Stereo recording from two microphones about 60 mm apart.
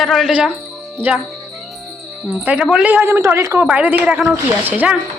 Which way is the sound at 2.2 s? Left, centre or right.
Centre.